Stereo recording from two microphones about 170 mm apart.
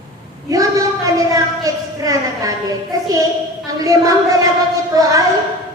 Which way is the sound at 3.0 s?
20° right (ahead or behind).